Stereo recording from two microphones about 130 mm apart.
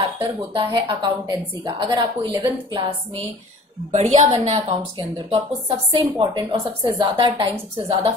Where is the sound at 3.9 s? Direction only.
60° right (ahead or behind).